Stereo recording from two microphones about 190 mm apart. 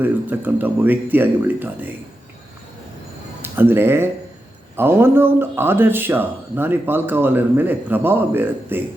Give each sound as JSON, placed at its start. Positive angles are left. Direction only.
{"t": 0.0, "sound": "speech", "side_deg": -10}
{"t": 3.4, "sound": "speech", "side_deg": -10}